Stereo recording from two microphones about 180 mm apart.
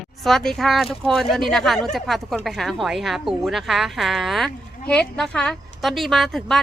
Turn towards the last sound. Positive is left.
turn(degrees=0)  # may be behind; listen again after turning